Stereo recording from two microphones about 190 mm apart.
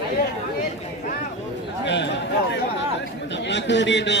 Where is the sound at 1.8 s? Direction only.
70° left (ahead or behind).